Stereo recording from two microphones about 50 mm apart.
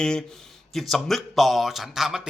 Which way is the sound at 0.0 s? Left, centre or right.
Centre.